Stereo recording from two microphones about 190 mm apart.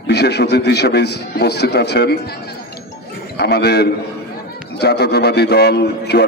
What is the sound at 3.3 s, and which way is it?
A man's voice, 60° left (ahead or behind).